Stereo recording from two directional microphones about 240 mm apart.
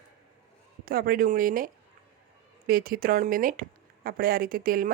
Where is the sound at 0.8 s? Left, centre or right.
Right.